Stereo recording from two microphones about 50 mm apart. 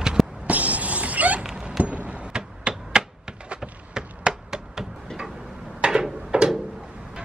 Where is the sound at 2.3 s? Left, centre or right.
Centre.